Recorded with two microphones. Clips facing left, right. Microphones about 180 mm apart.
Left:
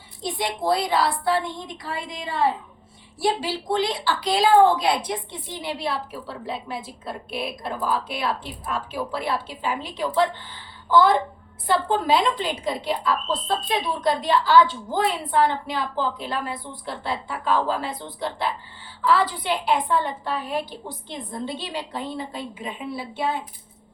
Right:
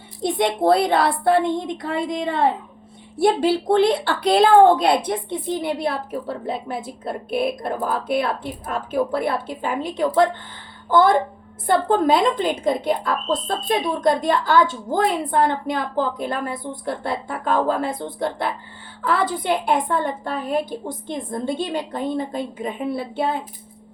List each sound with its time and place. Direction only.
0.2 s a woman's voice: 60° right (ahead or behind)
11.6 s a woman's voice: 50° right (ahead or behind)